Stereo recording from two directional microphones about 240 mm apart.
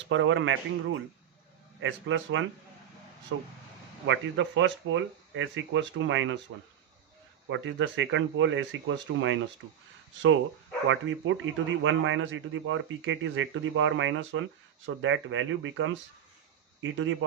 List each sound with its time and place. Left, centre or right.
0.1 s speech: right
7.5 s speech: right
10.8 s speech: right